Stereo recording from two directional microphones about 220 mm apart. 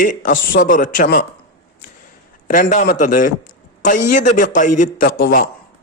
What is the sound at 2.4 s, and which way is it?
A man's voice, 35° left (ahead or behind).